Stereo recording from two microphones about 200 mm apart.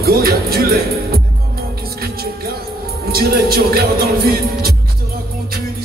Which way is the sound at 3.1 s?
50° right (ahead or behind).